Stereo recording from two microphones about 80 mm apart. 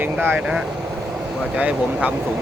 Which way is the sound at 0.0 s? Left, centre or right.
Right.